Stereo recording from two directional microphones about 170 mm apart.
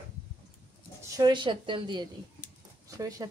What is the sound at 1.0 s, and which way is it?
A woman's voice, 20° right (ahead or behind).